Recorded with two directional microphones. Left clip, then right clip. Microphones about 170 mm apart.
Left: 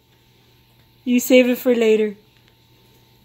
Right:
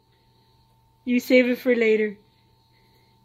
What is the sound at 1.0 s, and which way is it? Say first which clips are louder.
Speech: left 4 dB; centre (ahead or behind).